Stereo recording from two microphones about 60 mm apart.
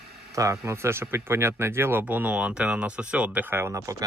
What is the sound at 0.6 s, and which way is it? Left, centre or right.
Speech, right.